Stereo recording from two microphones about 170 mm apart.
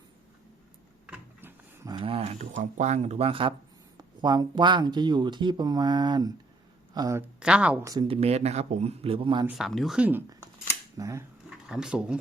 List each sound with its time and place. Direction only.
1.0 s a sound: 10° right (ahead or behind)
1.9 s speech: 30° right (ahead or behind)
7.3 s speech: 5° right (ahead or behind)
8.0 s speech: 35° right (ahead or behind)
9.5 s speech: centre (ahead or behind); by 11.3 s 20° right (ahead or behind)
11.4 s speech: 5° right (ahead or behind)